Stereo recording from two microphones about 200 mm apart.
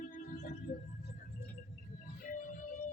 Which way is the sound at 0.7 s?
40° left (ahead or behind).